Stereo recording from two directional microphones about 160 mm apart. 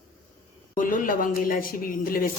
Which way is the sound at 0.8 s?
55° left (ahead or behind).